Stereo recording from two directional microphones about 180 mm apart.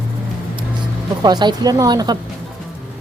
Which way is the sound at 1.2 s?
25° right (ahead or behind).